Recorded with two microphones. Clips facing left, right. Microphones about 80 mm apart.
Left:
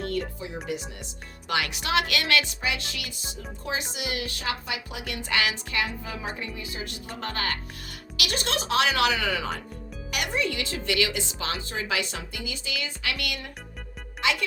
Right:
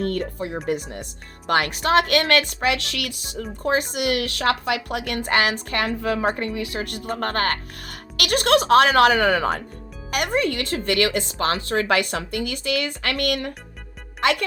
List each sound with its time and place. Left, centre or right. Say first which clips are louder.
0.0 s speech: right 5 dB; right
3.4 s speech: right 10 dB; right